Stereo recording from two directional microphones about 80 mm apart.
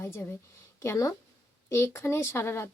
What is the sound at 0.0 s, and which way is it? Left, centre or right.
A woman's voice, left.